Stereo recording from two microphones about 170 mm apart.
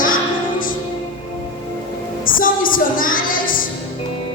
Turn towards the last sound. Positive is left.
turn(degrees=55)  # may be behind; listen again after turning